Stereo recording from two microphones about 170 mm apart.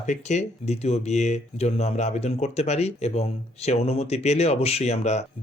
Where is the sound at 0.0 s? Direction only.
45° left (ahead or behind).